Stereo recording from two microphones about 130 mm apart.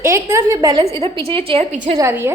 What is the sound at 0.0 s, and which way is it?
Speech, 20° right (ahead or behind).